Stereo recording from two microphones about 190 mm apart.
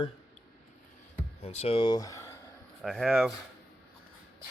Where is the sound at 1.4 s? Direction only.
35° left (ahead or behind); by 2.4 s 15° left (ahead or behind).